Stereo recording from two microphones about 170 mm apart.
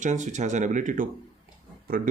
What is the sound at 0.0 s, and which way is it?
Speech, 45° right (ahead or behind).